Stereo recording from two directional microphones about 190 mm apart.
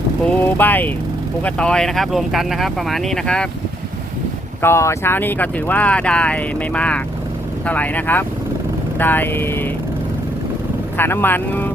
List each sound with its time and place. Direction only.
0.3 s speech: 10° left (ahead or behind)
4.6 s speech: 15° left (ahead or behind)
10.9 s speech: 10° left (ahead or behind)